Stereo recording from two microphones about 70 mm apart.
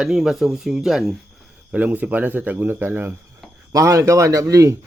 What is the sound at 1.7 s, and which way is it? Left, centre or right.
Speech, right.